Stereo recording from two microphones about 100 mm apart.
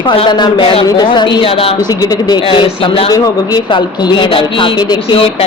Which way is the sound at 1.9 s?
40° left (ahead or behind).